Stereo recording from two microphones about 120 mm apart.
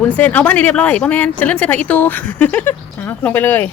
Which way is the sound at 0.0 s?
15° left (ahead or behind).